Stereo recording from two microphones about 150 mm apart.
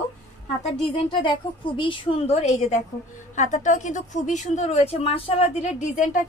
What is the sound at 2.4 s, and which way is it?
A woman's voice, 50° left (ahead or behind).